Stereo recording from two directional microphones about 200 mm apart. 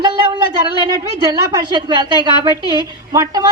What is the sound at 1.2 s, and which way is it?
A woman's voice, 20° right (ahead or behind).